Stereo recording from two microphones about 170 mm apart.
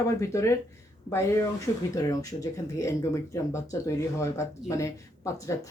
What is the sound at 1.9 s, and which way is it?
Speech, 20° left (ahead or behind).